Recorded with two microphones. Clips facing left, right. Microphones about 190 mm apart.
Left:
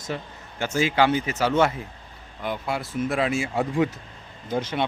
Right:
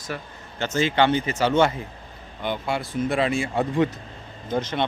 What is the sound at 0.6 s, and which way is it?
Speech, 10° left (ahead or behind).